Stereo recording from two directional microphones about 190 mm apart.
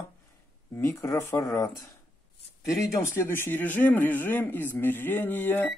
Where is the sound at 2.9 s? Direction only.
10° left (ahead or behind).